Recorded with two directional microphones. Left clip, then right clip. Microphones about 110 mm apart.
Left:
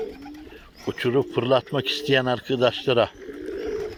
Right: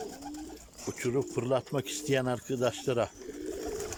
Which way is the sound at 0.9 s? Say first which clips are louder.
Left 9 dB; 5° right (ahead or behind).